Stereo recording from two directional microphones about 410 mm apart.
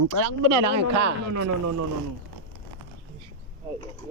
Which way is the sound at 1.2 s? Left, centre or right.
Right.